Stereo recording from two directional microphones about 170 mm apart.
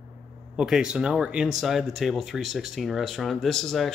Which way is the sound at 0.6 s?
5° right (ahead or behind).